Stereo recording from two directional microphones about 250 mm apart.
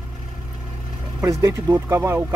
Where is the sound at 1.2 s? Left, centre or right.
Centre.